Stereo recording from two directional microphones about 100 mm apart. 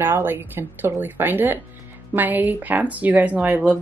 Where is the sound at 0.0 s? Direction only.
20° right (ahead or behind).